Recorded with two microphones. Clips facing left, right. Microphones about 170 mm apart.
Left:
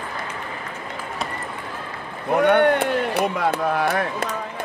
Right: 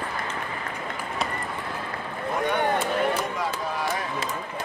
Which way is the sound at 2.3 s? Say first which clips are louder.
Left 9 dB; 65° left (ahead or behind).